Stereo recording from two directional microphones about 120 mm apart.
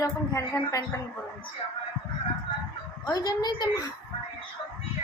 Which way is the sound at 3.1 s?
35° left (ahead or behind).